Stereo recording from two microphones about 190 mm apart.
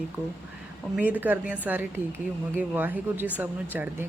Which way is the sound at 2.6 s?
10° right (ahead or behind).